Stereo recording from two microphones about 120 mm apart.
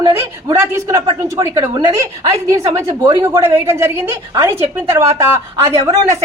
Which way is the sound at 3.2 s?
20° right (ahead or behind).